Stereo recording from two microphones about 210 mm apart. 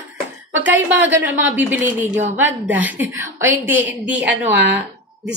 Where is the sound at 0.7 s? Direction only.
60° right (ahead or behind).